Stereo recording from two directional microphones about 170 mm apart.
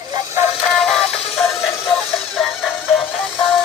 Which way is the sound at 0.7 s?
Centre (ahead or behind).